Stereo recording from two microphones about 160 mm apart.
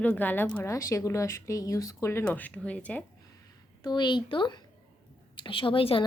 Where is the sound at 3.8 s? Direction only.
25° left (ahead or behind).